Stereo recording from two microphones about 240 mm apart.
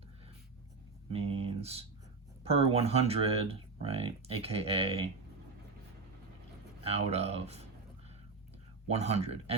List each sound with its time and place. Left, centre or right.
1.1 s speech: right
6.8 s speech: right
8.9 s speech: right